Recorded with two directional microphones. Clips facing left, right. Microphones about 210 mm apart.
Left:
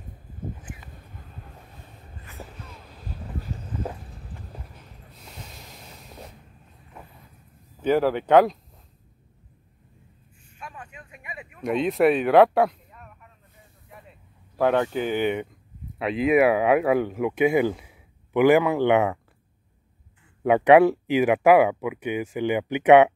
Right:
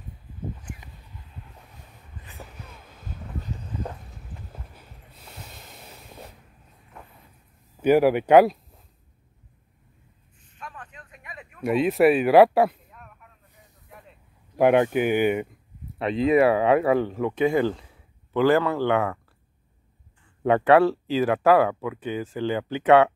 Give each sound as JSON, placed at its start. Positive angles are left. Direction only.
{"t": 1.0, "sound": "a sound", "side_deg": 50}
{"t": 2.4, "sound": "a sound", "side_deg": 10}
{"t": 4.7, "sound": "snort", "side_deg": 0}
{"t": 7.8, "sound": "speech", "side_deg": -10}
{"t": 10.5, "sound": "a sound", "side_deg": 10}
{"t": 11.6, "sound": "speech", "side_deg": -5}
{"t": 13.8, "sound": "vehicle", "side_deg": 0}
{"t": 14.6, "sound": "speech", "side_deg": -15}
{"t": 16.0, "sound": "speech", "side_deg": 5}
{"t": 20.4, "sound": "speech", "side_deg": 15}